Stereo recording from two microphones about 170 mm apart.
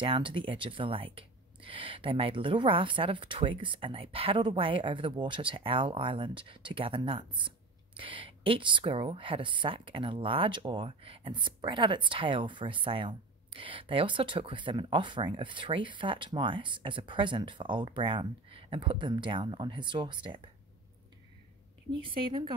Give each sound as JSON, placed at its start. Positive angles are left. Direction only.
{"t": 0.0, "sound": "speech", "side_deg": -30}
{"t": 21.9, "sound": "speech", "side_deg": -30}